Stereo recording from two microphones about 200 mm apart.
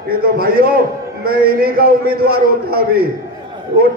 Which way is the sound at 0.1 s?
50° right (ahead or behind).